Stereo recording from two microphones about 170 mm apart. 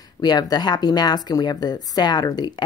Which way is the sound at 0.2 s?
25° left (ahead or behind).